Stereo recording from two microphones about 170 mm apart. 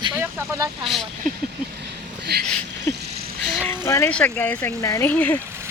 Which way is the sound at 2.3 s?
70° right (ahead or behind).